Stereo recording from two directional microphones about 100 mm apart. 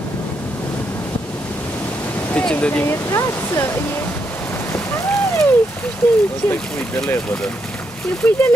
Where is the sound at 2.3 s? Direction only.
10° left (ahead or behind).